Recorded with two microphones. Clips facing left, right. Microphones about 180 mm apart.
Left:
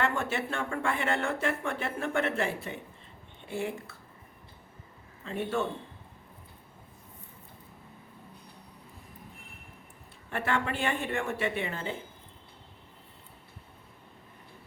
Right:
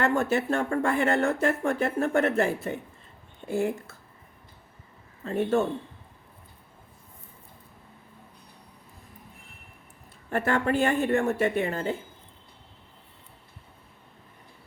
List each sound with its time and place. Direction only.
0.0 s speech: 40° right (ahead or behind)
5.2 s speech: 45° right (ahead or behind)
10.2 s speech: 40° right (ahead or behind)